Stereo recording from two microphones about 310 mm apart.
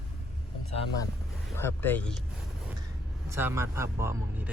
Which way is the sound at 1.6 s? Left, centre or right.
Centre.